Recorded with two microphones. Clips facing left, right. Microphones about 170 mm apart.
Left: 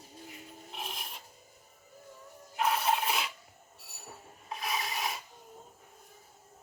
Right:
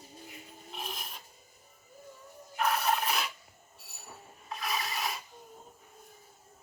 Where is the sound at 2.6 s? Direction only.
20° left (ahead or behind).